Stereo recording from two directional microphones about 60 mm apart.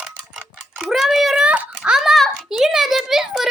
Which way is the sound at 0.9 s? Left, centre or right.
Centre.